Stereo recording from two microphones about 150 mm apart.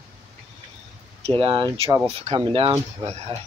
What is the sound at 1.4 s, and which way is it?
Speech, 35° right (ahead or behind).